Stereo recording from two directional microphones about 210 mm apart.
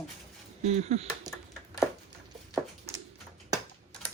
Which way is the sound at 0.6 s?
30° right (ahead or behind).